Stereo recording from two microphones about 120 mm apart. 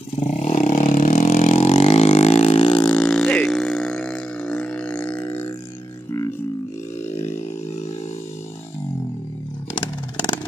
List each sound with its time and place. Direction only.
0.1 s vehicle: 60° left (ahead or behind)
2.8 s burping: 10° left (ahead or behind)